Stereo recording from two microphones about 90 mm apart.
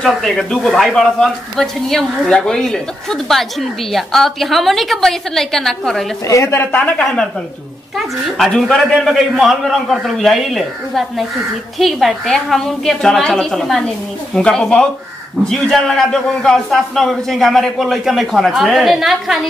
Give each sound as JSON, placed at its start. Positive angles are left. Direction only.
{"t": 0.0, "sound": "speech", "side_deg": 5}
{"t": 6.2, "sound": "a woman's voice", "side_deg": 35}
{"t": 6.8, "sound": "a woman's voice", "side_deg": 10}
{"t": 8.4, "sound": "speech", "side_deg": 5}